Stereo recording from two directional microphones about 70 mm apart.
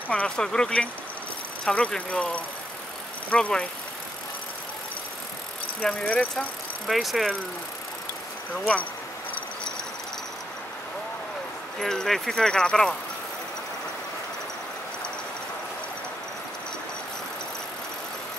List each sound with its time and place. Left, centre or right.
0.1 s speech: centre
5.8 s speech: centre
6.9 s speech: centre
11.8 s speech: centre